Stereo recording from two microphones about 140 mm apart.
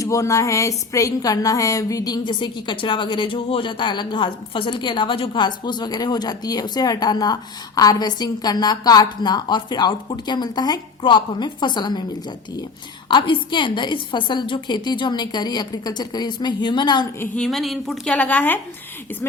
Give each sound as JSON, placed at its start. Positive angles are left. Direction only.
{"t": 0.0, "sound": "a sound", "side_deg": 25}
{"t": 13.1, "sound": "a woman's voice", "side_deg": 35}
{"t": 17.2, "sound": "speech", "side_deg": 5}